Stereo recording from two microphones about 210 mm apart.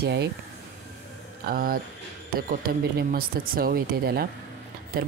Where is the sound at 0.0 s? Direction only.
55° right (ahead or behind).